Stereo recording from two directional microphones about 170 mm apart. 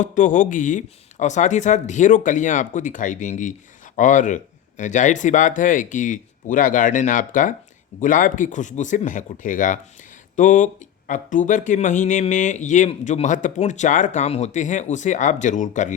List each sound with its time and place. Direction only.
0.0 s speech: 50° left (ahead or behind)